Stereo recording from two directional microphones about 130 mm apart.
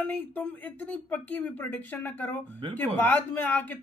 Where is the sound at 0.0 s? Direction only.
15° left (ahead or behind).